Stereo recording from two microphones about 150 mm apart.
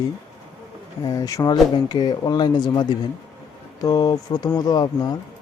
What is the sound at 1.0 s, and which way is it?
Speech, 20° left (ahead or behind).